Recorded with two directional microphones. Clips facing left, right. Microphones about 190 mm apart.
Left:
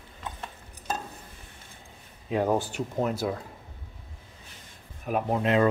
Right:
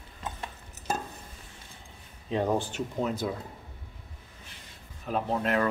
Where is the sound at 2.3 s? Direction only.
10° left (ahead or behind).